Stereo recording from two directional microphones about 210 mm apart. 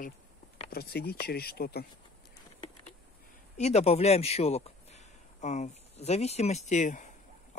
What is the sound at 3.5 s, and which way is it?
A man's voice, 30° left (ahead or behind).